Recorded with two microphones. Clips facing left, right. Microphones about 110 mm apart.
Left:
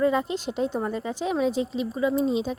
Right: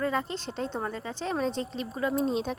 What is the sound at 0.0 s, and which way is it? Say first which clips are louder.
A woman's voice: left 6 dB; 15° left (ahead or behind).